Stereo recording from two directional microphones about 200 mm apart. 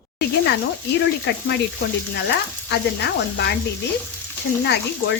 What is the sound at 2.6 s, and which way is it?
Speech, 60° left (ahead or behind).